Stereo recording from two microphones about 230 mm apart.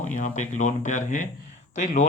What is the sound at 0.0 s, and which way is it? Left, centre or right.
Speech, left.